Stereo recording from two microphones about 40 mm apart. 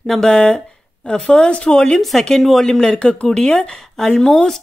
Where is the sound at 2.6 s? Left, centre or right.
Centre.